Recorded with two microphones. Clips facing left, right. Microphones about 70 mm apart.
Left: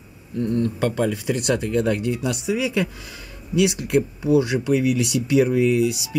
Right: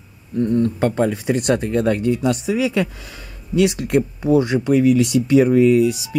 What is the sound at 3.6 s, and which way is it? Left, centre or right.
Speech, right.